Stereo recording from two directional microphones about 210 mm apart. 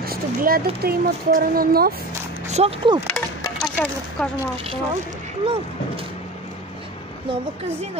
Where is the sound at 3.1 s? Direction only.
5° left (ahead or behind).